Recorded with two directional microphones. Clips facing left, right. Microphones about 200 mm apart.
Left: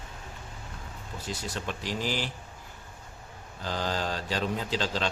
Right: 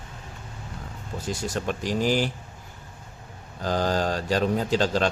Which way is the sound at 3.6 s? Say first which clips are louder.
Right 7 dB; 45° right (ahead or behind).